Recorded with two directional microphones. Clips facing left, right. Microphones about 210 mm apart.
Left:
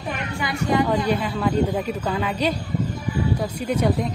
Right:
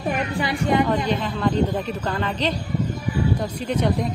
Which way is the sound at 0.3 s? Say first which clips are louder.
Right 3 dB; 35° right (ahead or behind).